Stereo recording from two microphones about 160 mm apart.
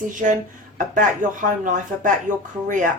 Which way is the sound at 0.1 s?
55° right (ahead or behind).